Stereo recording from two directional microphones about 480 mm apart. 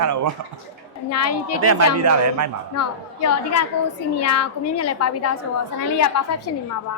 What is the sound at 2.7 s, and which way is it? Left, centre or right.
A child's voice, left.